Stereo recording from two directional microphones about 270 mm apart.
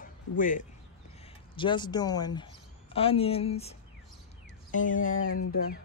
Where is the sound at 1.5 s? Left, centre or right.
Centre.